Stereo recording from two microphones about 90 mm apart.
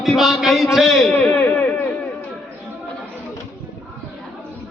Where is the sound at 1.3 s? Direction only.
20° left (ahead or behind).